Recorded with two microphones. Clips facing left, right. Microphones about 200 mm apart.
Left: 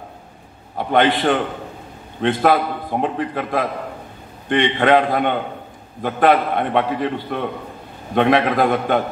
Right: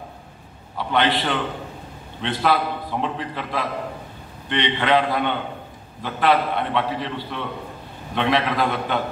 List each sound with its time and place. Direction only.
0.7 s a man's voice: 50° left (ahead or behind)